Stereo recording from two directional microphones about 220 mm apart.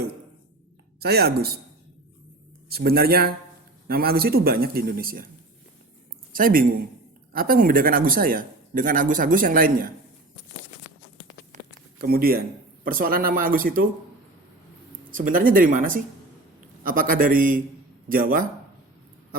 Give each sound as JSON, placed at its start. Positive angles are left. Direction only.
{"t": 0.9, "sound": "a man's voice", "side_deg": -45}
{"t": 2.6, "sound": "a man's voice", "side_deg": -45}
{"t": 6.3, "sound": "speech", "side_deg": -40}
{"t": 11.9, "sound": "speech", "side_deg": -45}
{"t": 15.1, "sound": "speech", "side_deg": -40}